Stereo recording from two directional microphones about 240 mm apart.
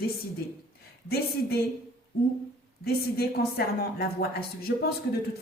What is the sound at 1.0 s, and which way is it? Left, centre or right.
Speech, left.